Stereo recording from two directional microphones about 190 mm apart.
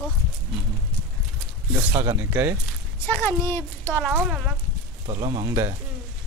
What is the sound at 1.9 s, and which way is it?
Speech, 15° right (ahead or behind).